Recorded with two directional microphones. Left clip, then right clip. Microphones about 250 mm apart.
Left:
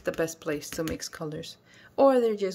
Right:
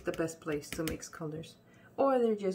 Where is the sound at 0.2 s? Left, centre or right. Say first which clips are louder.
Left 6 dB; left.